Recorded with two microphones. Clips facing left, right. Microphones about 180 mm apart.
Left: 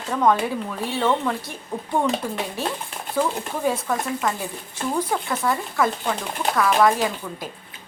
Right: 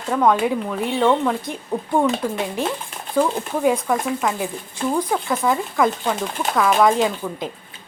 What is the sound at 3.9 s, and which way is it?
Speech, 15° right (ahead or behind).